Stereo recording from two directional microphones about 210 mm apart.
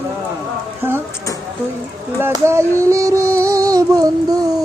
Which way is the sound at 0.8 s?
10° right (ahead or behind).